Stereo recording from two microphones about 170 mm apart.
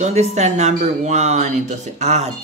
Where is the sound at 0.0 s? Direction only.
40° right (ahead or behind).